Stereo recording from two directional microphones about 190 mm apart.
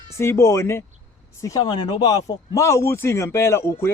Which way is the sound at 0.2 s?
15° left (ahead or behind).